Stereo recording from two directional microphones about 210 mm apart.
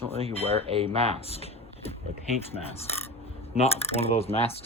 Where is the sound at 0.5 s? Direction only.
30° right (ahead or behind).